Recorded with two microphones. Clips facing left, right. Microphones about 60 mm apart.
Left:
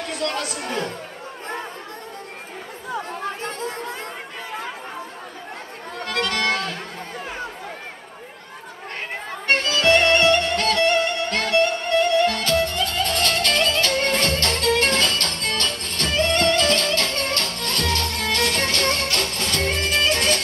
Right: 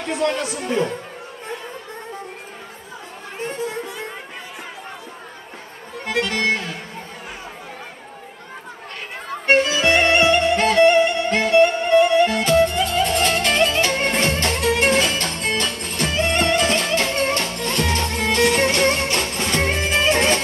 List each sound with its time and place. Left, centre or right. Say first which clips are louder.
0.0 s speech: right 4 dB; right
3.4 s music: right 2 dB; centre
6.0 s music: right 2 dB; centre
9.5 s music: right 2 dB; centre